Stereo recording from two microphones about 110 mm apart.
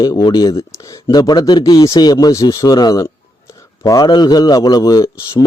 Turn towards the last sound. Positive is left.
turn(degrees=30)  # may be behind; listen again after turning